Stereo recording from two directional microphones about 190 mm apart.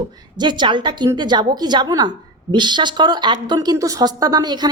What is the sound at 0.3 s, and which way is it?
A woman's voice, 25° right (ahead or behind).